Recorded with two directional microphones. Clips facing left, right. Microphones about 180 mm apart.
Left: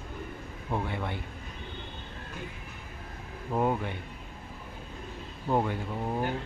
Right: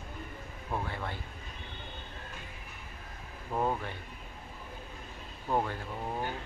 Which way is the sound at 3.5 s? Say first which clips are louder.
Left 4 dB; 10° left (ahead or behind).